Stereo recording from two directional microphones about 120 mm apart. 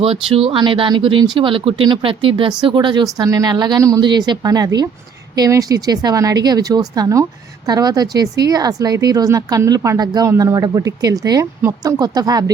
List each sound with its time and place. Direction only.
0.0 s speech: 50° right (ahead or behind); by 12.5 s 30° right (ahead or behind)